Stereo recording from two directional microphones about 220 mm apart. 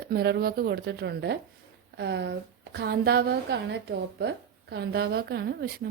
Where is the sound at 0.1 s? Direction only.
45° right (ahead or behind).